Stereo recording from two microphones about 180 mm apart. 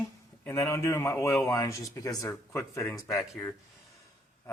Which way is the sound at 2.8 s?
5° left (ahead or behind).